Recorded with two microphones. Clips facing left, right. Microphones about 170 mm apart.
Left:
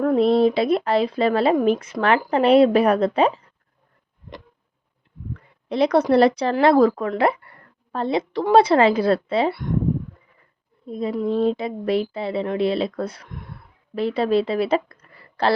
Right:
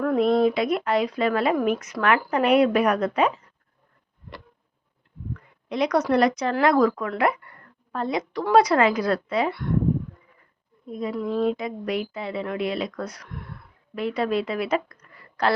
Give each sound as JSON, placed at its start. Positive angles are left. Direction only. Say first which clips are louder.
{"t": 0.0, "sound": "speech", "louder": "left 3 dB", "side_deg": 30}
{"t": 5.6, "sound": "speech", "louder": "left 4 dB", "side_deg": 30}
{"t": 10.8, "sound": "speech", "louder": "left 4 dB", "side_deg": 30}